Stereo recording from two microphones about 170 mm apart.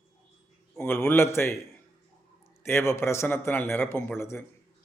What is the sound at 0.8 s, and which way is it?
Speech, 10° left (ahead or behind).